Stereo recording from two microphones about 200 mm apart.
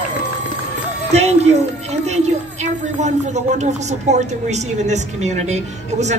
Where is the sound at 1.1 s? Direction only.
30° right (ahead or behind).